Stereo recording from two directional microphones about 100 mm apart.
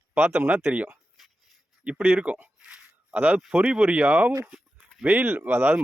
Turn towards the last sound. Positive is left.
turn(degrees=-20)  # may be behind; listen again after turning